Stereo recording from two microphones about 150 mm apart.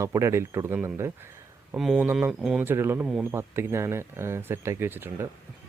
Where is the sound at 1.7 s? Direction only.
5° right (ahead or behind).